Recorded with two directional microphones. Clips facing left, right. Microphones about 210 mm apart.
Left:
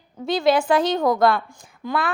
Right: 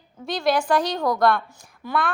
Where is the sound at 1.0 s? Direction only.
25° left (ahead or behind).